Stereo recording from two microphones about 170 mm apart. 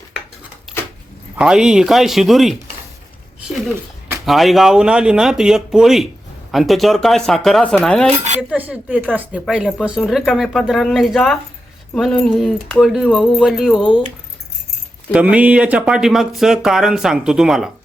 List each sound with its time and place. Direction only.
1.4 s speech: 5° right (ahead or behind)
4.3 s speech: centre (ahead or behind)
8.4 s speech: 10° right (ahead or behind)
15.1 s speech: 10° right (ahead or behind)